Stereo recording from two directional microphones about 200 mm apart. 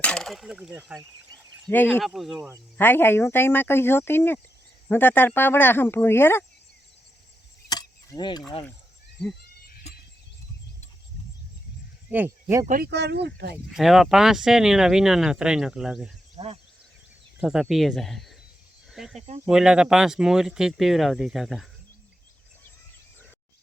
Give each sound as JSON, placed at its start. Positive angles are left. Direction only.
{"t": 0.0, "sound": "speech", "side_deg": 5}
{"t": 1.6, "sound": "speech", "side_deg": 10}
{"t": 1.9, "sound": "speech", "side_deg": 0}
{"t": 2.7, "sound": "speech", "side_deg": 10}
{"t": 7.7, "sound": "a sound", "side_deg": 20}
{"t": 9.6, "sound": "a sound", "side_deg": 50}
{"t": 12.1, "sound": "speech", "side_deg": -10}
{"t": 12.6, "sound": "speech", "side_deg": -45}
{"t": 13.7, "sound": "speech", "side_deg": 0}
{"t": 16.4, "sound": "speech", "side_deg": -20}
{"t": 17.4, "sound": "speech", "side_deg": -5}